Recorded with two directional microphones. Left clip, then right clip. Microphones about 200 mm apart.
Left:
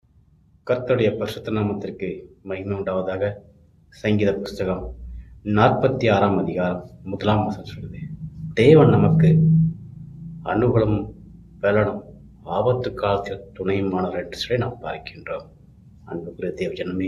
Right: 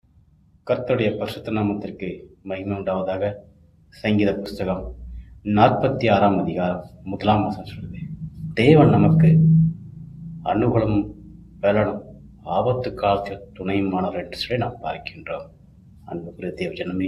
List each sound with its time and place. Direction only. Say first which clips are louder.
0.7 s a man's voice: left 1 dB; 15° left (ahead or behind)
10.4 s a man's voice: left 1 dB; 15° left (ahead or behind)